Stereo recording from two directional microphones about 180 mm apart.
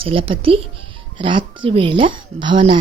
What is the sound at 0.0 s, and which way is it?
Speech, 30° right (ahead or behind).